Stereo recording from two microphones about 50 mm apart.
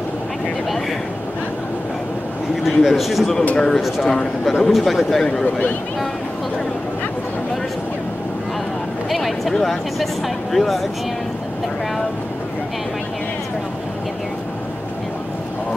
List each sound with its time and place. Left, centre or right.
2.6 s a man's voice: centre
3.5 s a man's voice: centre
5.2 s speech: centre
9.1 s a man's voice: centre